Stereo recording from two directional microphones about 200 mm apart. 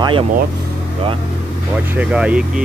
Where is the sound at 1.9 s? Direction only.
5° right (ahead or behind).